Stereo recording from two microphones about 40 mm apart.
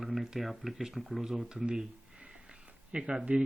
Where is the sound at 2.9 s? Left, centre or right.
Right.